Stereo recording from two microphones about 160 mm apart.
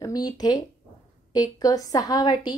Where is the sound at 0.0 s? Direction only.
25° left (ahead or behind).